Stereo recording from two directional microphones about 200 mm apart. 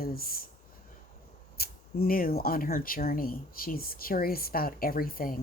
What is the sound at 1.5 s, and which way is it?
Speech, 50° left (ahead or behind).